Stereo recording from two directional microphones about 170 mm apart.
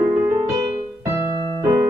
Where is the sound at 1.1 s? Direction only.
15° right (ahead or behind).